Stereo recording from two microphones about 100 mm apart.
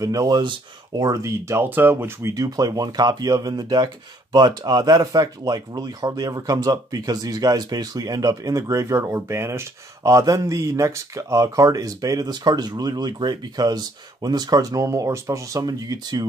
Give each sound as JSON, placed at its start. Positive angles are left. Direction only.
{"t": 0.0, "sound": "speech", "side_deg": -35}
{"t": 0.4, "sound": "speech", "side_deg": -50}
{"t": 1.0, "sound": "speech", "side_deg": -35}
{"t": 2.3, "sound": "speech", "side_deg": -40}